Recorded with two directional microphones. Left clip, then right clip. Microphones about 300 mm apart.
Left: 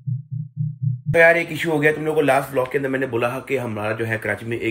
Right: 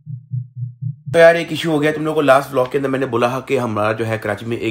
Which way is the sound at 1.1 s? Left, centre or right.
Centre.